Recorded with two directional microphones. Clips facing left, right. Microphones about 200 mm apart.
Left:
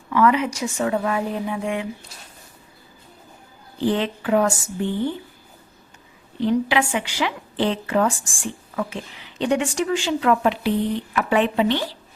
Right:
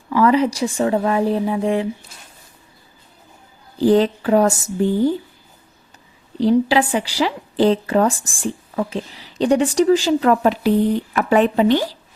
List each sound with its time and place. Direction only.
0.1 s a woman's voice: 35° right (ahead or behind)
3.8 s a woman's voice: 40° right (ahead or behind)
6.4 s a woman's voice: 35° right (ahead or behind)